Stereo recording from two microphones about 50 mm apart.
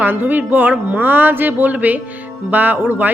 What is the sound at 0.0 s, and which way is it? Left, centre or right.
Speech, right.